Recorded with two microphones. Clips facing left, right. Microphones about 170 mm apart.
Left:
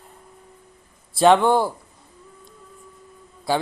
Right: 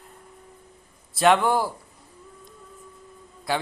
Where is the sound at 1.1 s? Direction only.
30° left (ahead or behind).